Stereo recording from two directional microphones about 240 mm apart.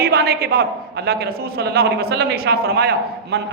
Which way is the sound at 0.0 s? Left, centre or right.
Right.